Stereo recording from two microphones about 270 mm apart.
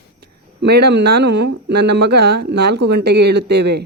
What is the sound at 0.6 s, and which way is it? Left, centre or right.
Speech, right.